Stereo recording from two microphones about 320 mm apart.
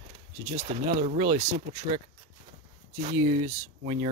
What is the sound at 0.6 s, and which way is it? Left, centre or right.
Speech, right.